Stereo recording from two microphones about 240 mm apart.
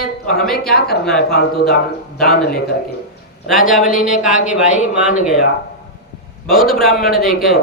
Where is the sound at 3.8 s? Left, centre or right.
Left.